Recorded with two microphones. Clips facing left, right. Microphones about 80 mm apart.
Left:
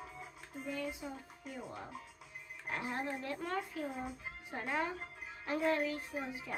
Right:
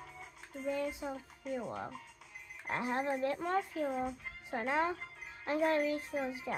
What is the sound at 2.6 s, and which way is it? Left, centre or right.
Speech, right.